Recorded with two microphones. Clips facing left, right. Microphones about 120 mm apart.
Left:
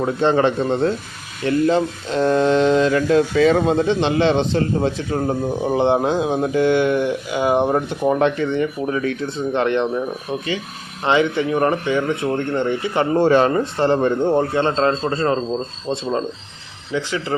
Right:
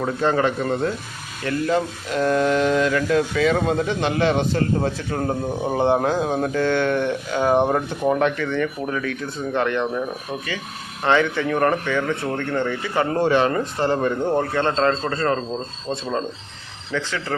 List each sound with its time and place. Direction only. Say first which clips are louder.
0.0 s speech: left 3 dB; 25° left (ahead or behind)
11.0 s speech: left 2 dB; 20° left (ahead or behind)
13.1 s speech: left 5 dB; 35° left (ahead or behind); by 17.3 s 15° left (ahead or behind)